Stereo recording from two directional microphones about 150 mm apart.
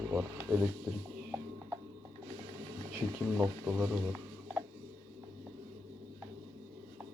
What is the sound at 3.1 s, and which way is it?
Speech, 20° right (ahead or behind).